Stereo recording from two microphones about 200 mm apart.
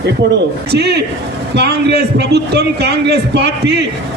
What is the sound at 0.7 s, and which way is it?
A man's voice, 55° right (ahead or behind).